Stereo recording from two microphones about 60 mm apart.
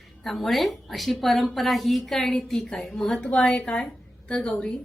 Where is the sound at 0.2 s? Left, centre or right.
Centre.